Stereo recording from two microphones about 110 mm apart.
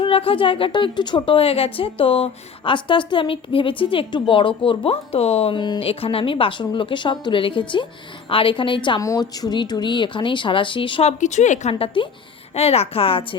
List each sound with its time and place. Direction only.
0.0 s a woman's voice: 55° left (ahead or behind)
5.5 s a woman's voice: 40° left (ahead or behind)
5.8 s a woman's voice: 60° left (ahead or behind)
9.0 s a woman's voice: 30° left (ahead or behind); by 11.0 s 50° left (ahead or behind)
11.0 s speech: 90° left
11.7 s a woman's voice: 55° left (ahead or behind)
12.5 s a woman's voice: 65° left (ahead or behind)